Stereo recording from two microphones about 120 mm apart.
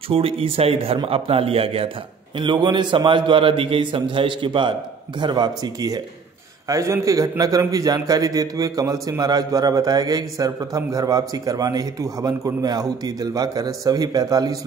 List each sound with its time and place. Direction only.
0.1 s a man's voice: 50° right (ahead or behind); by 14.6 s 35° right (ahead or behind)